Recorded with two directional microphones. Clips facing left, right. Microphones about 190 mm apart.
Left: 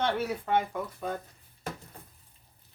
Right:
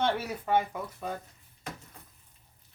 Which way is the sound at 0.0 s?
10° right (ahead or behind).